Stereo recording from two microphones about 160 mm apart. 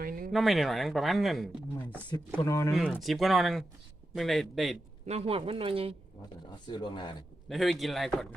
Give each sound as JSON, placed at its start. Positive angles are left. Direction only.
{"t": 0.0, "sound": "a sound", "side_deg": -60}
{"t": 0.3, "sound": "speech", "side_deg": 0}
{"t": 2.4, "sound": "speech", "side_deg": 20}
{"t": 2.7, "sound": "speech", "side_deg": -5}
{"t": 5.0, "sound": "speech", "side_deg": -40}
{"t": 6.7, "sound": "speech", "side_deg": 30}
{"t": 7.4, "sound": "speech", "side_deg": 0}